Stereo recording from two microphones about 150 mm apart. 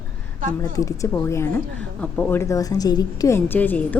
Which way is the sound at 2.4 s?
20° left (ahead or behind).